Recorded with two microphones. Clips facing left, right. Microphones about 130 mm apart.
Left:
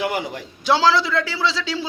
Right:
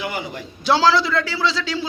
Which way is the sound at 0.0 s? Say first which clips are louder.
Left 3 dB; 75° left (ahead or behind).